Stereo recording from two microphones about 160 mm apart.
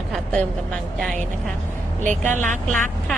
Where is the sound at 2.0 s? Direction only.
50° right (ahead or behind).